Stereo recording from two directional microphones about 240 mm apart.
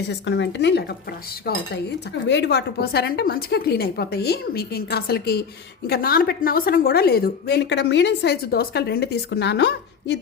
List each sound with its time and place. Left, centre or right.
0.1 s a woman's voice: left